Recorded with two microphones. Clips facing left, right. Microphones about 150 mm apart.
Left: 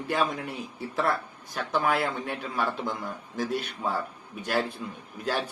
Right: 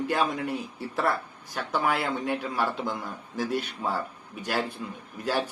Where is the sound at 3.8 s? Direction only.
5° right (ahead or behind).